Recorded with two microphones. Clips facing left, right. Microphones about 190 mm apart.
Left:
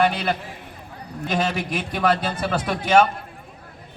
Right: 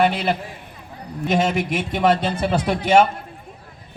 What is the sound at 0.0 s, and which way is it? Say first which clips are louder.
A man's voice: right 2 dB; 25° right (ahead or behind).